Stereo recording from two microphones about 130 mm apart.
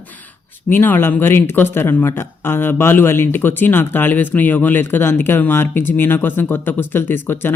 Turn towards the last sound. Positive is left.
turn(degrees=15)  # may be behind; listen again after turning